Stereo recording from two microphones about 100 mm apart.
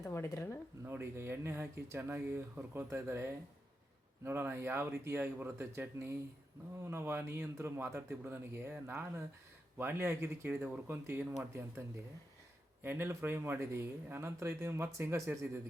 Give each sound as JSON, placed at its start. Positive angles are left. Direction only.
{"t": 0.0, "sound": "speech", "side_deg": 25}
{"t": 0.9, "sound": "speech", "side_deg": -25}
{"t": 12.8, "sound": "speech", "side_deg": -20}